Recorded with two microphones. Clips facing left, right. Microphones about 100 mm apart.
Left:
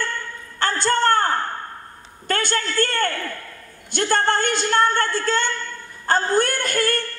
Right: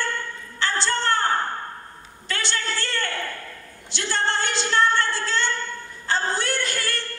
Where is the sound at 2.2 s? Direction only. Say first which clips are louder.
Left 5 dB; 50° left (ahead or behind).